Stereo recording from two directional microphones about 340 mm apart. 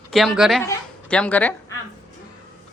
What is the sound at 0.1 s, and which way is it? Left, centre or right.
A woman's voice, centre.